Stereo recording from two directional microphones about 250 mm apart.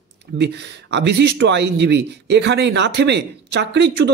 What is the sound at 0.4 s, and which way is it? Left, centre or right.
Speech, right.